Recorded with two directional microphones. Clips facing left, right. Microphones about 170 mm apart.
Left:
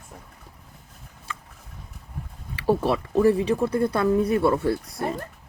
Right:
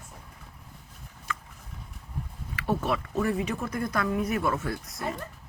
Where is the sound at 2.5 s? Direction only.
30° left (ahead or behind).